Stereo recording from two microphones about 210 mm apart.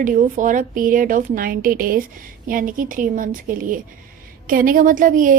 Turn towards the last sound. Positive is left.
turn(degrees=-40)  # may be behind; listen again after turning